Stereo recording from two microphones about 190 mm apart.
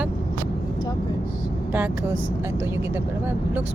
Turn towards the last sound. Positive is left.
turn(degrees=-10)  # may be behind; listen again after turning